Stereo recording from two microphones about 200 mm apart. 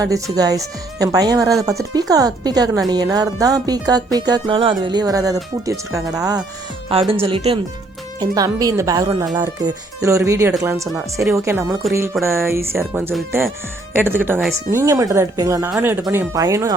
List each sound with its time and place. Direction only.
0.3 s music: 20° right (ahead or behind)
4.8 s speech: 20° right (ahead or behind)
7.1 s music: 25° right (ahead or behind)
8.2 s speech: 20° right (ahead or behind)
11.8 s music: centre (ahead or behind)
12.2 s speech: 15° right (ahead or behind)